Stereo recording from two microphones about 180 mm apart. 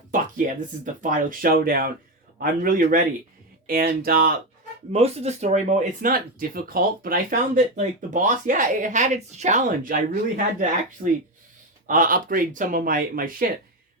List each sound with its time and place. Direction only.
0.1 s a sound: 45° right (ahead or behind)
1.0 s speech: 50° right (ahead or behind)
4.9 s speech: 35° right (ahead or behind)
11.9 s speech: 50° right (ahead or behind)